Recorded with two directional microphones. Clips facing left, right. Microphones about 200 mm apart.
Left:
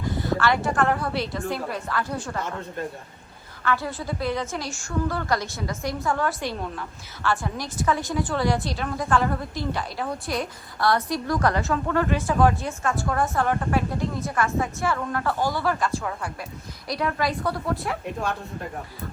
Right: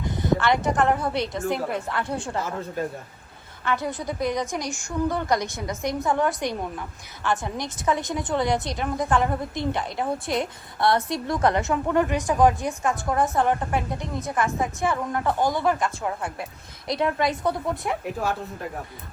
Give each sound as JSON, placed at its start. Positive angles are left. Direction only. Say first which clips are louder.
{"t": 0.0, "sound": "a woman's voice", "louder": "right 1 dB", "side_deg": -20}
{"t": 3.6, "sound": "a woman's voice", "louder": "even", "side_deg": -20}
{"t": 18.0, "sound": "speech", "louder": "right 1 dB", "side_deg": -5}